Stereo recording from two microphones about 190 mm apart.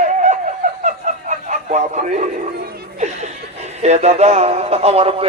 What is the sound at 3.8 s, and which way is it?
Speech, 35° right (ahead or behind).